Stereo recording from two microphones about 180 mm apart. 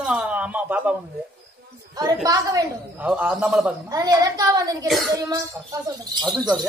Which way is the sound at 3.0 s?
5° right (ahead or behind).